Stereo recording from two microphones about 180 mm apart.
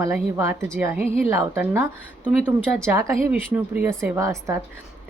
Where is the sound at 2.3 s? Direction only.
5° left (ahead or behind).